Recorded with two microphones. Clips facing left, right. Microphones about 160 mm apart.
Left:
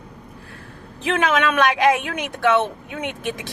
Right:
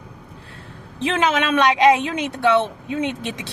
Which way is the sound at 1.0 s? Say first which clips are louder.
Even; 25° right (ahead or behind).